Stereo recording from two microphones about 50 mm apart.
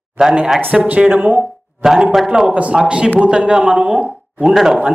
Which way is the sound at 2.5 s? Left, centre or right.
Right.